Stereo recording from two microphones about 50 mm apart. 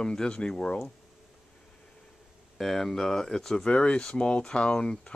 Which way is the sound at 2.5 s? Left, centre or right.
Centre.